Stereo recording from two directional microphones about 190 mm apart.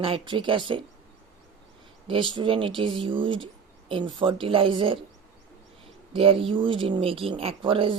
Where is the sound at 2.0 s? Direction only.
25° right (ahead or behind).